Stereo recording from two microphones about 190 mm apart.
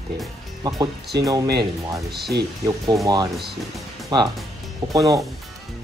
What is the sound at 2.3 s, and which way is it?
Speech, 60° right (ahead or behind).